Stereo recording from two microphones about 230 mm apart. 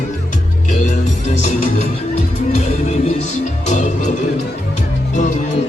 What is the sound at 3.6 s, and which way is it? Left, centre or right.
Music, left.